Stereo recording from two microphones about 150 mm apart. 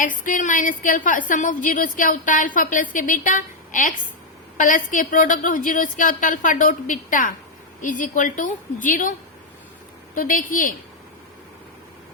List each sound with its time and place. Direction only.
0.0 s a woman's voice: 60° left (ahead or behind)
10.2 s a woman's voice: 65° left (ahead or behind)